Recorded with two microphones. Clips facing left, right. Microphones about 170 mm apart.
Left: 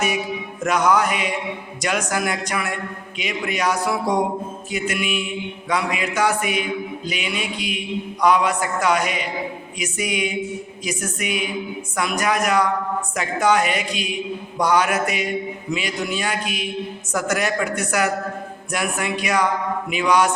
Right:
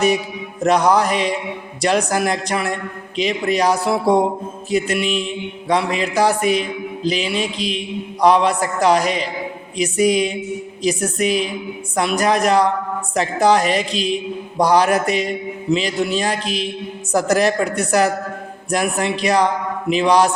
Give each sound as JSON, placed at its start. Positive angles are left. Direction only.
{"t": 0.6, "sound": "mantra", "side_deg": -35}